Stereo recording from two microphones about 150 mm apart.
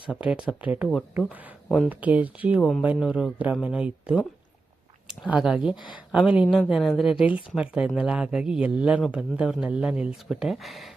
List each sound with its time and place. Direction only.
0.1 s speech: 5° right (ahead or behind)
1.9 s speech: 10° right (ahead or behind)
2.6 s a woman's voice: 5° left (ahead or behind)
5.3 s a woman's voice: 5° right (ahead or behind)